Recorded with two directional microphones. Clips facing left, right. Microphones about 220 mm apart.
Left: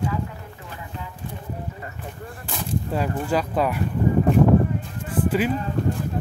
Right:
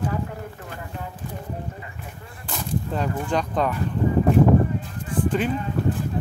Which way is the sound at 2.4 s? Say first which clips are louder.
Even; 5° left (ahead or behind).